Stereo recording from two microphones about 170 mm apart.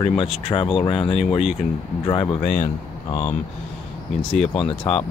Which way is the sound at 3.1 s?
45° left (ahead or behind).